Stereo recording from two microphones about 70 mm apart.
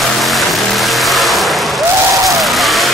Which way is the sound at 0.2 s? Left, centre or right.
Centre.